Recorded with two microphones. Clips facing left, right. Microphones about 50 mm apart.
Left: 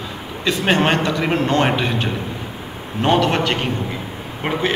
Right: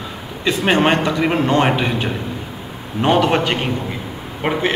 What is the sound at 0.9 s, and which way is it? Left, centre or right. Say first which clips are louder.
Speech: right 1 dB; right.